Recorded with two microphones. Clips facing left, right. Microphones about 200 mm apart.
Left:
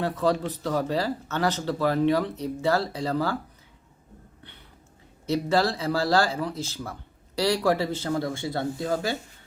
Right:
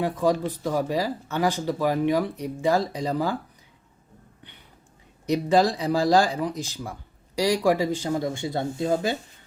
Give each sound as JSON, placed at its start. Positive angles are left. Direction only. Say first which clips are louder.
{"t": 0.0, "sound": "speech", "louder": "right 2 dB", "side_deg": -15}
{"t": 5.2, "sound": "speech", "louder": "right 3 dB", "side_deg": -15}